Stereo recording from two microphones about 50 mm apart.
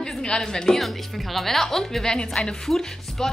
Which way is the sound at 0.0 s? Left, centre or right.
Centre.